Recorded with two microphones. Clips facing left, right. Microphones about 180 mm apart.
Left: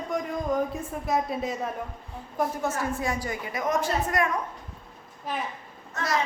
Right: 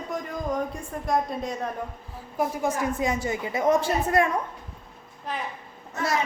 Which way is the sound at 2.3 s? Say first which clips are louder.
Right 2 dB; 10° right (ahead or behind).